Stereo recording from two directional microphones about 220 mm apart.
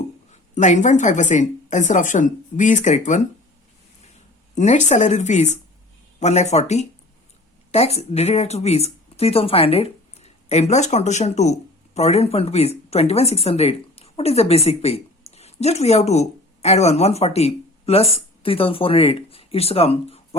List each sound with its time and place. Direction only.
0.3 s a woman's voice: 30° left (ahead or behind)
4.5 s a woman's voice: 30° left (ahead or behind)